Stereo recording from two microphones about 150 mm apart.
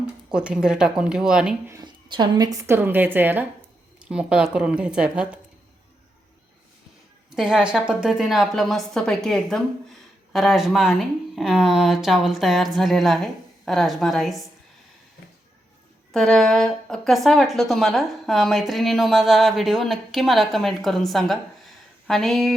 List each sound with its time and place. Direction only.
0.3 s speech: 5° right (ahead or behind)
1.8 s a woman's voice: 30° right (ahead or behind); by 5.4 s 5° right (ahead or behind)
7.3 s speech: 5° right (ahead or behind)
16.1 s speech: 5° left (ahead or behind)